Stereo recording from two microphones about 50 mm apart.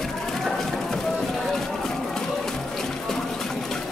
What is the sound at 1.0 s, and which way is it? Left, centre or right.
Run, centre.